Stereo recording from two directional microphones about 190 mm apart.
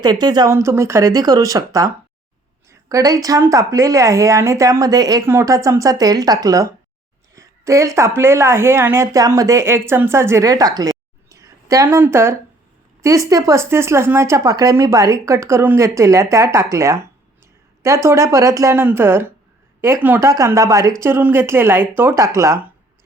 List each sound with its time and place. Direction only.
0.0 s a woman's voice: 20° right (ahead or behind)